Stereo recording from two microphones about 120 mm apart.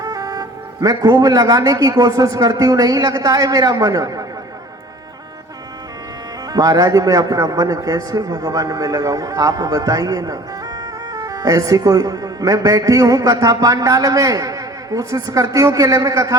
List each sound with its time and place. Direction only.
0.0 s a man's voice: 30° right (ahead or behind)
6.5 s a man's voice: 30° right (ahead or behind)